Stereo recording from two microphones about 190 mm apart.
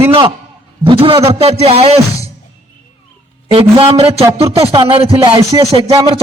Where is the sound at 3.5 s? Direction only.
30° right (ahead or behind).